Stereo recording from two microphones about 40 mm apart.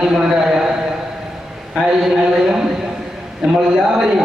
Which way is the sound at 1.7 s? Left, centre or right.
Centre.